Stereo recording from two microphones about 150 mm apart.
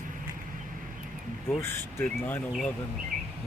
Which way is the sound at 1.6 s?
15° left (ahead or behind).